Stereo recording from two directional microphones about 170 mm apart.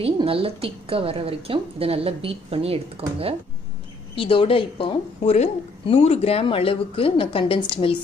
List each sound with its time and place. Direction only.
0.0 s a woman's voice: 35° right (ahead or behind)
4.1 s a woman's voice: 30° left (ahead or behind)